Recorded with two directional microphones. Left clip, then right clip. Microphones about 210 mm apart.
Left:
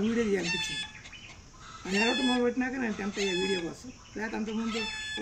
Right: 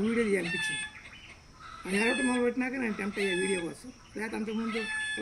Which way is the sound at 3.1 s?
55° left (ahead or behind).